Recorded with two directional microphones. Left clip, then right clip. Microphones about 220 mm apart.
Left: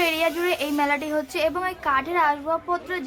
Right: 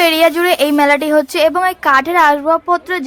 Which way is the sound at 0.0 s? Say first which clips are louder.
Right 11 dB; 40° right (ahead or behind).